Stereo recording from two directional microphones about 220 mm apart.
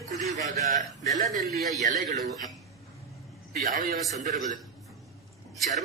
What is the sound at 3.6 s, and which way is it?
Speech, 40° right (ahead or behind).